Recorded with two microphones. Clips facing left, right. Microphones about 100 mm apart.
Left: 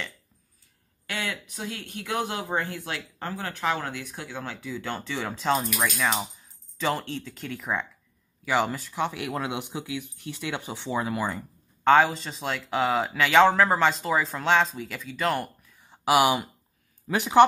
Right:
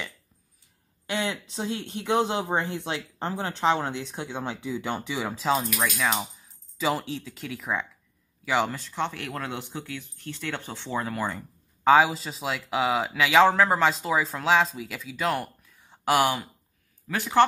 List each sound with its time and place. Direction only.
1.0 s speech: 20° right (ahead or behind); by 17.5 s 20° left (ahead or behind)